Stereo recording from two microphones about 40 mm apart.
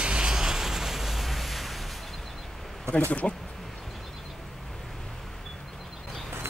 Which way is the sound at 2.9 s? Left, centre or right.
Right.